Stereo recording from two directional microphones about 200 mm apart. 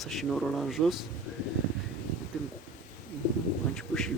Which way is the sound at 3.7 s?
Centre (ahead or behind).